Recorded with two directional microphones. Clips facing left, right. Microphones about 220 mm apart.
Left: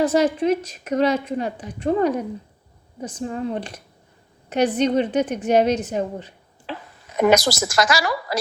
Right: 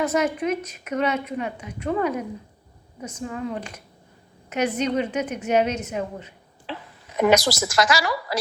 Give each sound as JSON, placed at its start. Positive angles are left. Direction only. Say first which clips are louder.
{"t": 0.0, "sound": "a woman's voice", "louder": "left 4 dB", "side_deg": 30}
{"t": 6.7, "sound": "speech", "louder": "left 2 dB", "side_deg": 45}